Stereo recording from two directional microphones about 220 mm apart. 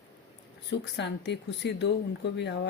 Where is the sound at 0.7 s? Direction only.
50° left (ahead or behind).